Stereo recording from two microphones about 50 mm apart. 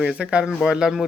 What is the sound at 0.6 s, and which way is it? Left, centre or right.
Speech, centre.